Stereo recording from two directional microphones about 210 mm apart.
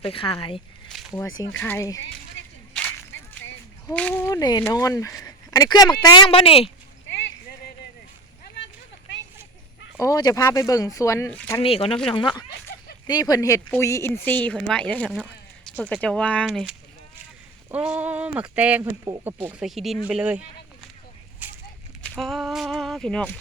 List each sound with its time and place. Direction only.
0.0 s speech: 25° left (ahead or behind)
1.4 s speech: 10° left (ahead or behind)
3.8 s speech: 5° left (ahead or behind); by 6.7 s 25° left (ahead or behind)
10.0 s speech: 15° left (ahead or behind)
11.6 s speech: 25° left (ahead or behind); by 20.4 s 5° right (ahead or behind)
21.4 s a sound: 10° right (ahead or behind)
22.1 s speech: centre (ahead or behind)